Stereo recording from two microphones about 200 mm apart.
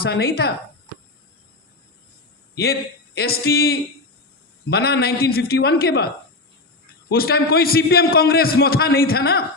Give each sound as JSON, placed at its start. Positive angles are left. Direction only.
{"t": 0.0, "sound": "a man's voice", "side_deg": 50}
{"t": 3.2, "sound": "a man's voice", "side_deg": 50}